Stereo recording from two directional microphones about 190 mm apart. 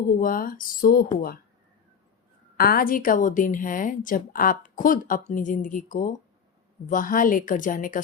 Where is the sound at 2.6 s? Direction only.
50° left (ahead or behind).